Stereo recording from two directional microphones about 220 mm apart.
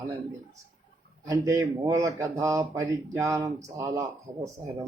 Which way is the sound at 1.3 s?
15° right (ahead or behind).